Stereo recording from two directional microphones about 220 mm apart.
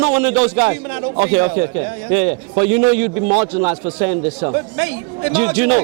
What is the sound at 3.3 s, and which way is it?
A man's voice, 25° right (ahead or behind).